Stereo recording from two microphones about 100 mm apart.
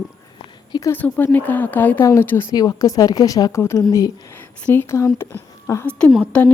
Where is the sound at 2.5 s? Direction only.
40° left (ahead or behind).